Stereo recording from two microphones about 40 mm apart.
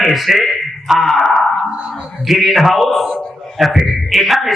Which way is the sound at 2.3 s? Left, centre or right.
Centre.